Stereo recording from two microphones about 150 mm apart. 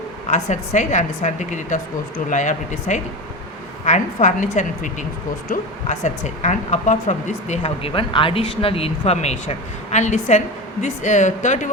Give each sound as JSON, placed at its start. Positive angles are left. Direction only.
{"t": 0.3, "sound": "a woman's voice", "side_deg": 55}